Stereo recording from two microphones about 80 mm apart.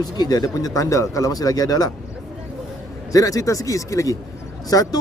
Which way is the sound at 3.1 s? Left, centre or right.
Left.